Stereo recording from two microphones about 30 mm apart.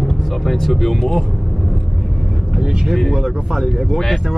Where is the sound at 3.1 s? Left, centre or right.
Centre.